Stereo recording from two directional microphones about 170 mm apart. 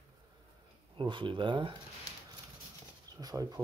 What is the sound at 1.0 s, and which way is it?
Speech, 30° right (ahead or behind).